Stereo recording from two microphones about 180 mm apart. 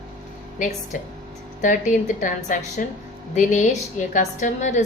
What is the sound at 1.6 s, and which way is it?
A woman's voice, 45° left (ahead or behind).